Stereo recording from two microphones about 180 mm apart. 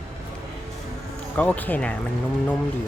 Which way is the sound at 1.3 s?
10° left (ahead or behind).